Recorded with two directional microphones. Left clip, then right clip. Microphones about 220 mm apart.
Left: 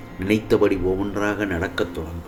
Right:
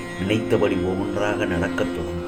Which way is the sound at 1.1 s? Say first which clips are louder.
Right 1 dB; 45° left (ahead or behind).